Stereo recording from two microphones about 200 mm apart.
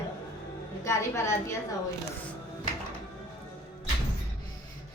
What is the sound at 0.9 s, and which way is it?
Speech, 15° left (ahead or behind).